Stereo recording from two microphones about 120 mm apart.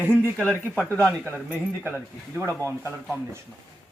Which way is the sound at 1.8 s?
20° right (ahead or behind).